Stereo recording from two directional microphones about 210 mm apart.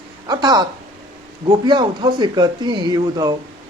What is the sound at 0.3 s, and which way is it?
Speech, 20° right (ahead or behind).